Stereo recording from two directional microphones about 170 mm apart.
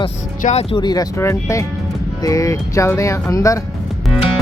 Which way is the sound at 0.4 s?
40° left (ahead or behind).